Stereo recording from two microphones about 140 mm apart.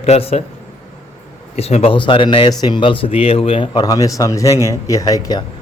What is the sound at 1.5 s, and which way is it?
A man's voice, 45° left (ahead or behind).